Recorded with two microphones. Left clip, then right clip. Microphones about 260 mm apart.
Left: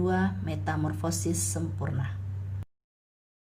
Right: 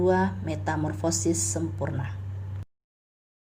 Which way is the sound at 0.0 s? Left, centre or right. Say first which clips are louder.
Right 5 dB; centre.